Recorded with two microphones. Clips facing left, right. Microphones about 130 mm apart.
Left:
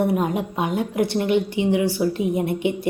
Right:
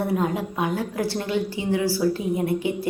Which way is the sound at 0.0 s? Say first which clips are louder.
Left 3 dB; 20° left (ahead or behind).